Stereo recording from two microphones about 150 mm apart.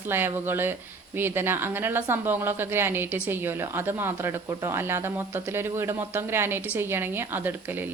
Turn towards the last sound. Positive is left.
turn(degrees=-15)  # may be behind; listen again after turning